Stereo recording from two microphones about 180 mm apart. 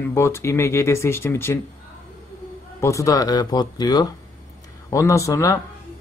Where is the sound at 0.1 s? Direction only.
15° left (ahead or behind).